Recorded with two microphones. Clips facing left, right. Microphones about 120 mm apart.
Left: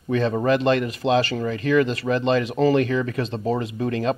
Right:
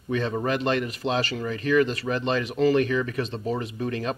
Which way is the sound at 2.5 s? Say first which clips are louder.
Right 2 dB; 35° left (ahead or behind).